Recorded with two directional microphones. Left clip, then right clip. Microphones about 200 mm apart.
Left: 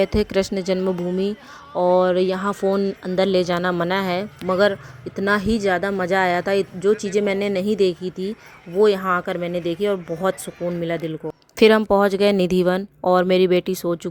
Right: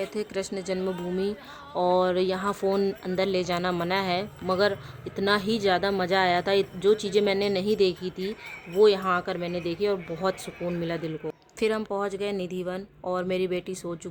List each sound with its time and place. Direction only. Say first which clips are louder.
0.0 s speech: left 11 dB; 45° left (ahead or behind); by 3.2 s 20° left (ahead or behind)
3.2 s speech: left 8 dB; 30° left (ahead or behind)
11.9 s speech: left 12 dB; 50° left (ahead or behind)